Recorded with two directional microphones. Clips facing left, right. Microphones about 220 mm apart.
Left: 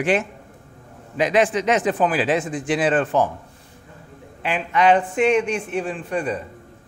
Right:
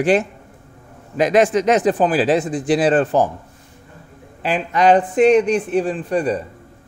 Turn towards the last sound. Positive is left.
turn(degrees=-35)  # may be behind; listen again after turning